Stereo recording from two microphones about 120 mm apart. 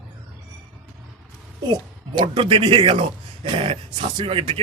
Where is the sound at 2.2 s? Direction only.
45° right (ahead or behind).